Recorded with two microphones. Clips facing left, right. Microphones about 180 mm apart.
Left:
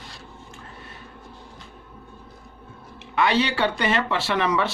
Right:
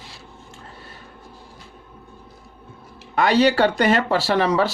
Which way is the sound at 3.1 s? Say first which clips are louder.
Right 5 dB; 40° right (ahead or behind).